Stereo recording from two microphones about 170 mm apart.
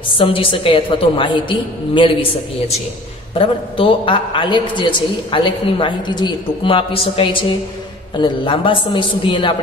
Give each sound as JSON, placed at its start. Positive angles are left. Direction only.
{"t": 0.2, "sound": "a woman's voice", "side_deg": 30}